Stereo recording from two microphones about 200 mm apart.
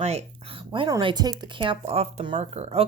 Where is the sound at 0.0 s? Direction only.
30° right (ahead or behind).